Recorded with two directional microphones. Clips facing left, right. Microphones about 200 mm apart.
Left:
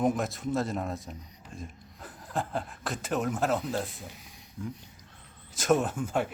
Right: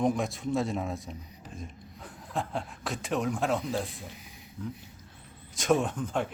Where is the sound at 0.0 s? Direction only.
5° left (ahead or behind).